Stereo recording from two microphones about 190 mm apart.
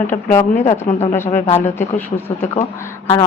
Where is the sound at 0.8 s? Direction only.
35° left (ahead or behind).